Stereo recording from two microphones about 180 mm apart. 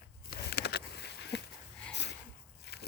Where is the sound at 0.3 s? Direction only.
65° left (ahead or behind).